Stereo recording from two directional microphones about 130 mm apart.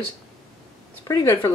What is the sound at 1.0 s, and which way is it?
Speech, 20° left (ahead or behind).